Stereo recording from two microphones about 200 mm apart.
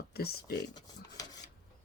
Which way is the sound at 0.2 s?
50° left (ahead or behind).